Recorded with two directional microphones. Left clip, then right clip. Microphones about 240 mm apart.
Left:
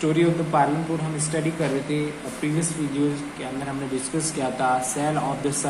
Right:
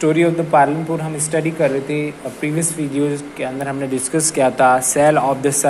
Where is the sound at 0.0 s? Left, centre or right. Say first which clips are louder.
Right 6 dB; right.